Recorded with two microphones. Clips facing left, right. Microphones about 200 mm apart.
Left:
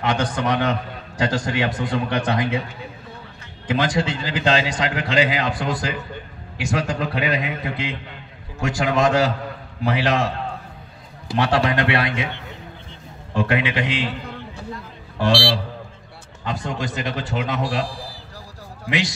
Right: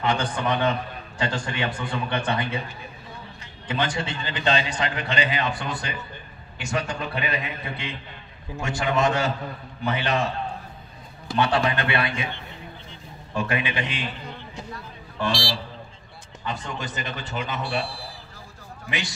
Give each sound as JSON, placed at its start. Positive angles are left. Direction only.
{"t": 0.0, "sound": "a man's voice", "side_deg": 90}
{"t": 11.3, "sound": "a man's voice", "side_deg": 90}
{"t": 13.4, "sound": "a man's voice", "side_deg": 90}
{"t": 18.9, "sound": "a man's voice", "side_deg": 90}